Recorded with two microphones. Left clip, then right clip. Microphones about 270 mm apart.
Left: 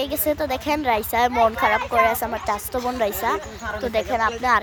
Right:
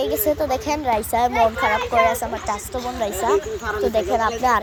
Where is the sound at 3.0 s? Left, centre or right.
Centre.